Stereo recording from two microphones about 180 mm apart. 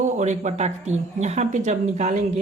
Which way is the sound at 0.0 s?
40° right (ahead or behind).